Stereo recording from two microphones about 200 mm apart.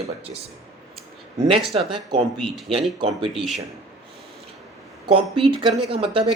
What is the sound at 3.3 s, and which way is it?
Speech, centre (ahead or behind).